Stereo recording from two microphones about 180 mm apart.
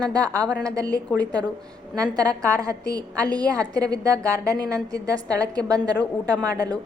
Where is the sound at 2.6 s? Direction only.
20° right (ahead or behind).